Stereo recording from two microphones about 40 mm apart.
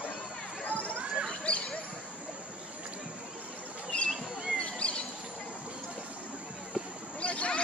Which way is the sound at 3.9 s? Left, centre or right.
Left.